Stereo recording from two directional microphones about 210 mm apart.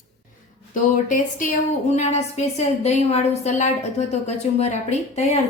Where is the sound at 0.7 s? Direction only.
40° left (ahead or behind).